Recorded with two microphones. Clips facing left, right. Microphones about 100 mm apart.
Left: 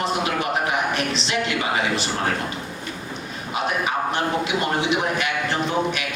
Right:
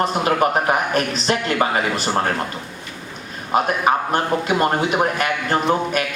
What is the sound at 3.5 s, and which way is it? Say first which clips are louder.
A man's voice: right 6 dB; 45° right (ahead or behind).